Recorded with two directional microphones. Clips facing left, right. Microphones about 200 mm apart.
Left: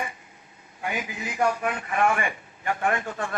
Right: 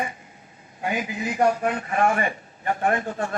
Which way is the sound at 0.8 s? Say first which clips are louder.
Right 4 dB; 40° right (ahead or behind).